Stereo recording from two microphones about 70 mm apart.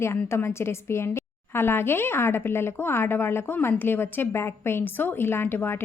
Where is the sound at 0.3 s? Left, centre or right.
Left.